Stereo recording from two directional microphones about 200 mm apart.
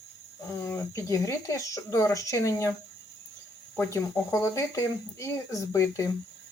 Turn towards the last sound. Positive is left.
turn(degrees=15)  # may be behind; listen again after turning